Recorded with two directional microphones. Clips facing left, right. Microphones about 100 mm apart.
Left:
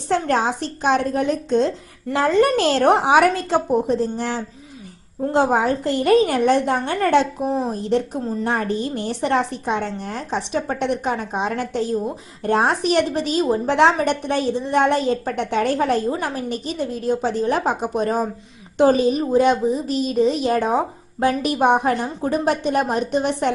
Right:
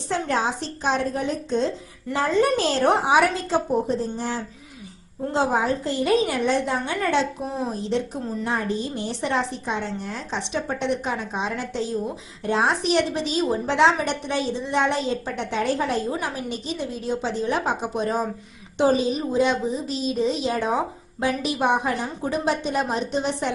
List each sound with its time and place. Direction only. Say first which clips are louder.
0.1 s a woman's voice: left 4 dB; 60° left (ahead or behind)
5.3 s a woman's voice: left 4 dB; 55° left (ahead or behind)